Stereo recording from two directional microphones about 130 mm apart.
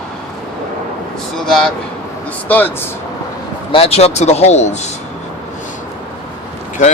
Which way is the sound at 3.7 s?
50° left (ahead or behind).